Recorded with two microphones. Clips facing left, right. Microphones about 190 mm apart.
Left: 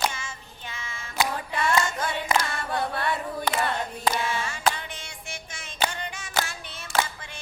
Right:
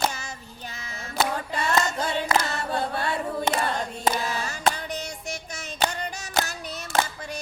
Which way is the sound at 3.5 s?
40° right (ahead or behind).